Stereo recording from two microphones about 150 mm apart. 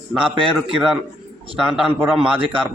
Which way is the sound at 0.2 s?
35° right (ahead or behind).